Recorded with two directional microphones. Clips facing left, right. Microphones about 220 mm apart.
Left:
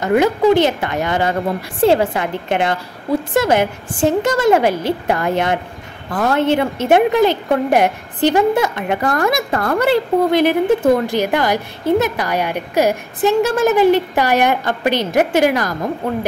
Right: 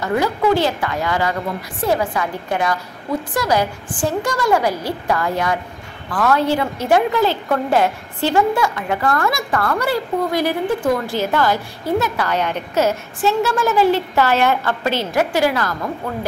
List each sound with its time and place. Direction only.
0.0 s a woman's voice: 20° left (ahead or behind)